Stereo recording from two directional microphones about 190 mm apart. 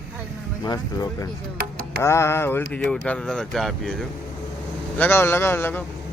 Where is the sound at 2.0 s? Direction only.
15° left (ahead or behind).